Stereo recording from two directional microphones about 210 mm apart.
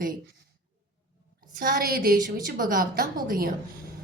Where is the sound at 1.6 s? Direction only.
45° right (ahead or behind).